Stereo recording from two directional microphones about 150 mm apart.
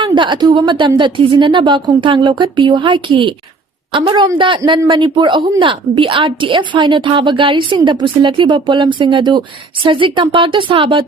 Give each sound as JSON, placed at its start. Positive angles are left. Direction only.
{"t": 0.0, "sound": "a woman's voice", "side_deg": -30}